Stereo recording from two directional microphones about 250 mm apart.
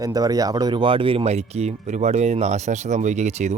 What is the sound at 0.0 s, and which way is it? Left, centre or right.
Speech, centre.